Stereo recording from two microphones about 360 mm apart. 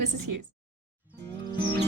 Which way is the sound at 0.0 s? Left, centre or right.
Right.